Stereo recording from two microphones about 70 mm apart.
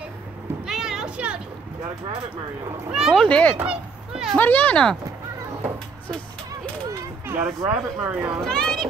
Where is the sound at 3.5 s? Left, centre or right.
Centre.